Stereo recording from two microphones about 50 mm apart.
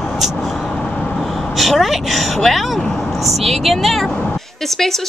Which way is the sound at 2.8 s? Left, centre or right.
Centre.